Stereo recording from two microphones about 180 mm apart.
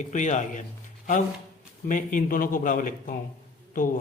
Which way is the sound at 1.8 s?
45° left (ahead or behind).